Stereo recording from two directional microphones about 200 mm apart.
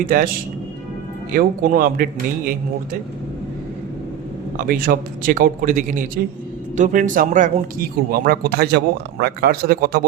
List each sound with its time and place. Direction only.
0.0 s speech: 45° right (ahead or behind)
1.3 s speech: 45° right (ahead or behind)
4.5 s speech: 45° right (ahead or behind)